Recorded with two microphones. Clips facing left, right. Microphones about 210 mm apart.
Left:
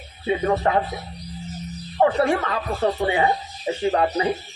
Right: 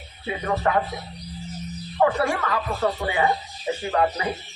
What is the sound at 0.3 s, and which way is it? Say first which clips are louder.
Speech: left 4 dB; 25° left (ahead or behind).